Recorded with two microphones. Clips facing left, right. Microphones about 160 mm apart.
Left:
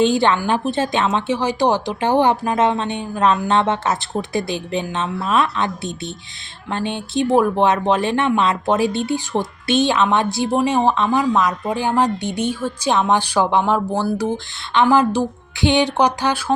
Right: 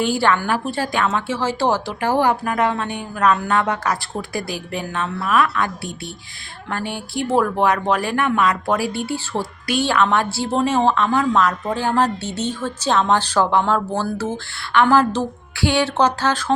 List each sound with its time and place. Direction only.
0.0 s a woman's voice: 20° left (ahead or behind)